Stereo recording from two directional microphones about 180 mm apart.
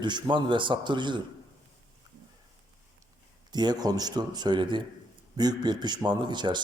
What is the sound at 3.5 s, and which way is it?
A man's voice, 25° right (ahead or behind).